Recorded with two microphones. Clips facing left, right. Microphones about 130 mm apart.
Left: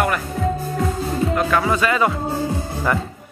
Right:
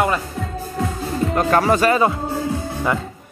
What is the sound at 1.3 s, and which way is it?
Speech, 40° right (ahead or behind).